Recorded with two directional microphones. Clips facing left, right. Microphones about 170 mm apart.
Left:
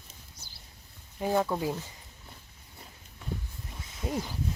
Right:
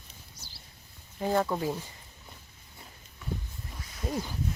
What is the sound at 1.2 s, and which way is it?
Speech, 10° left (ahead or behind).